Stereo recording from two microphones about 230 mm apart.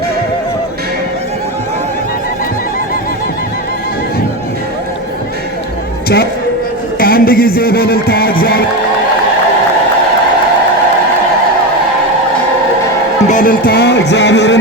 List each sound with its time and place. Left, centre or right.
7.0 s music: left
13.2 s speech: left